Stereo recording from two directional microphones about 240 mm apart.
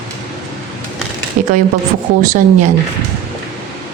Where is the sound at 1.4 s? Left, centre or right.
Right.